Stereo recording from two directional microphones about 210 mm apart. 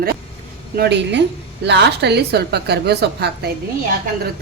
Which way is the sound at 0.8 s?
55° right (ahead or behind).